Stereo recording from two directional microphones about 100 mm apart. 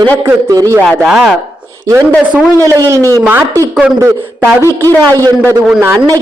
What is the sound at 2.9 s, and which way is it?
Speech, 30° right (ahead or behind).